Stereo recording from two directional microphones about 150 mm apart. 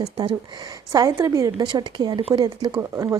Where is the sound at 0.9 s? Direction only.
20° right (ahead or behind).